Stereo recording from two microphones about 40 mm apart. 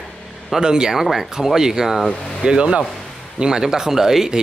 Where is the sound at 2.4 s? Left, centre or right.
Right.